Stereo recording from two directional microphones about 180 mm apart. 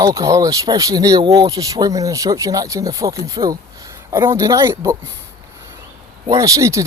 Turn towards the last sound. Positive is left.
turn(degrees=-15)  # may be behind; listen again after turning